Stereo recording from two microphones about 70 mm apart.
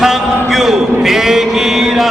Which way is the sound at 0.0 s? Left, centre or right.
Centre.